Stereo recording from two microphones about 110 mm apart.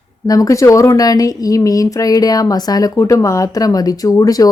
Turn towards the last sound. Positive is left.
turn(degrees=35)  # may be behind; listen again after turning